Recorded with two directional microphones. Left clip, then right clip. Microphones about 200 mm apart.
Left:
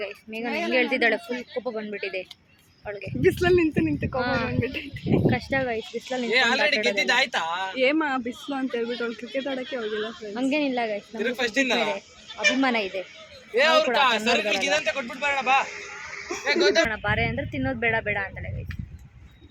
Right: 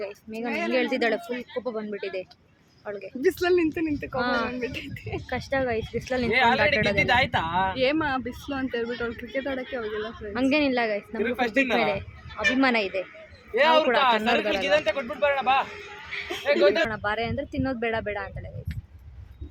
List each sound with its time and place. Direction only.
0.0 s speech: centre (ahead or behind)
3.2 s speech: 20° left (ahead or behind)
4.2 s speech: 5° right (ahead or behind)
4.6 s speech: 10° left (ahead or behind)
5.3 s speech: centre (ahead or behind)
6.2 s speech: 55° right (ahead or behind)
7.8 s speech: 30° left (ahead or behind)
10.3 s speech: 5° right (ahead or behind)
11.2 s speech: 50° right (ahead or behind)
12.5 s speech: 5° right (ahead or behind)
13.5 s speech: 55° right (ahead or behind)
16.4 s speech: 50° right (ahead or behind)
16.9 s speech: centre (ahead or behind)